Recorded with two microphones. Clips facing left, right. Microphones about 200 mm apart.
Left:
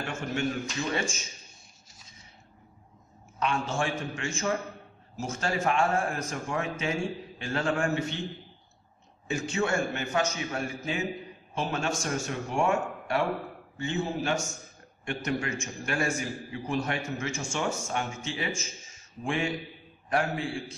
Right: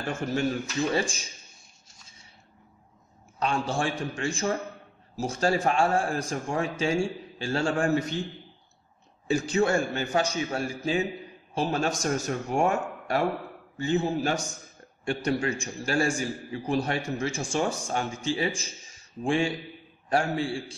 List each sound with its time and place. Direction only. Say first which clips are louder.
0.0 s a man's voice: right 3 dB; 35° right (ahead or behind)
3.3 s a man's voice: right 2 dB; 35° right (ahead or behind)
9.3 s a man's voice: right 5 dB; 35° right (ahead or behind)